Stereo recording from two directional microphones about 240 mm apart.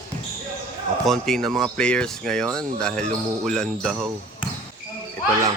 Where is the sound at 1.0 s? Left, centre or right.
Centre.